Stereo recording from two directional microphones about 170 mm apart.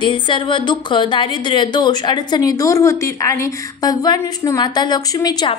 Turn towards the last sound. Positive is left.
turn(degrees=25)  # may be behind; listen again after turning